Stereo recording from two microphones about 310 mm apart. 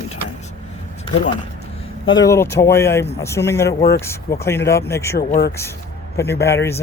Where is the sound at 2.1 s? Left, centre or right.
Centre.